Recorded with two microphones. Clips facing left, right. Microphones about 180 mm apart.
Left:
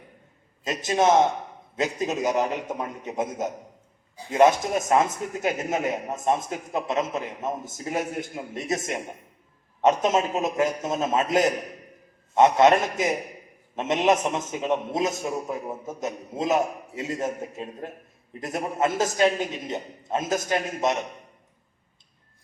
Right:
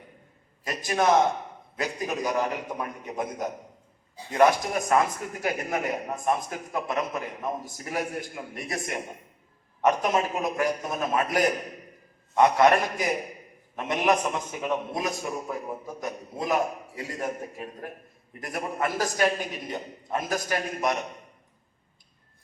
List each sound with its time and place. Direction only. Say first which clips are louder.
0.6 s a sound: left 3 dB; 20° left (ahead or behind)
1.7 s a man's voice: left 4 dB; 20° left (ahead or behind)
9.8 s a man's voice: left 3 dB; 20° left (ahead or behind)